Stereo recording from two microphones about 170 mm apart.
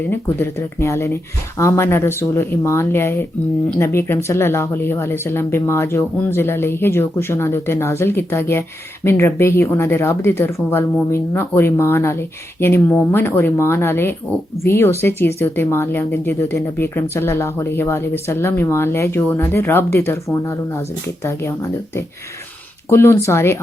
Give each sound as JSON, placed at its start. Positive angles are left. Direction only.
{"t": 0.0, "sound": "speech", "side_deg": 10}
{"t": 22.9, "sound": "speech", "side_deg": 15}